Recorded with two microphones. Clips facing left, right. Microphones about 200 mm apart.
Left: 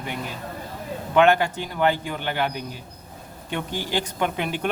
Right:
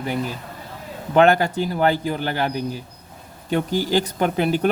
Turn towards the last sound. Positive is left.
turn(degrees=-40)  # may be behind; listen again after turning